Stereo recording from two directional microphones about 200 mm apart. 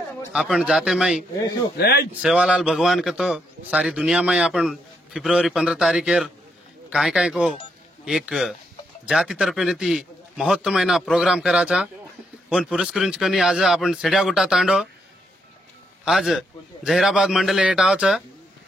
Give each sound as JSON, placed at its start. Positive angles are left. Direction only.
{"t": 0.3, "sound": "a man's voice", "side_deg": -5}
{"t": 1.8, "sound": "speech", "side_deg": 50}
{"t": 2.2, "sound": "a man's voice", "side_deg": -5}
{"t": 16.1, "sound": "a man's voice", "side_deg": 0}